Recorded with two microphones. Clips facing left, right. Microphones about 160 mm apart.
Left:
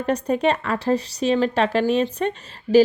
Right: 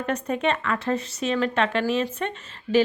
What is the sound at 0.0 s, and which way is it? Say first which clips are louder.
A woman's voice: left 5 dB; 35° left (ahead or behind).